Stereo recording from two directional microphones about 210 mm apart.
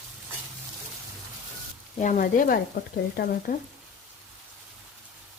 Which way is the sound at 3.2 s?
50° left (ahead or behind).